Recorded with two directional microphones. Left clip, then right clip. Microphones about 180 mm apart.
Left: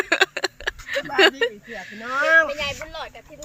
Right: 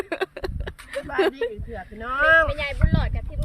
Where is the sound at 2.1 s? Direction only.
20° right (ahead or behind).